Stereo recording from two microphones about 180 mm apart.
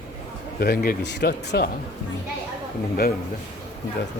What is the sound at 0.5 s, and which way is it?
Speech, 60° left (ahead or behind).